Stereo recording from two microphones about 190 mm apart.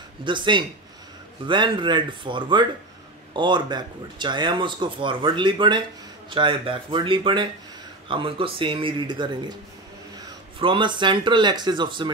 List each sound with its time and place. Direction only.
0.2 s speech: 25° right (ahead or behind)